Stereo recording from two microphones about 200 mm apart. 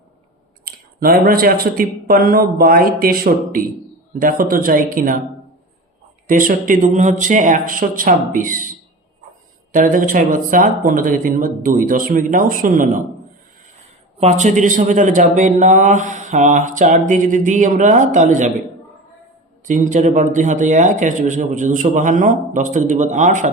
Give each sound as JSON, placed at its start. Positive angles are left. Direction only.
{"t": 0.6, "sound": "speech", "side_deg": -45}
{"t": 6.2, "sound": "speech", "side_deg": -45}
{"t": 9.7, "sound": "speech", "side_deg": -40}
{"t": 14.2, "sound": "a man's voice", "side_deg": -35}
{"t": 19.6, "sound": "a man's voice", "side_deg": -40}